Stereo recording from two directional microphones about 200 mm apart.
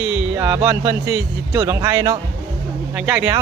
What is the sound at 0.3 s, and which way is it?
Speech, 15° right (ahead or behind).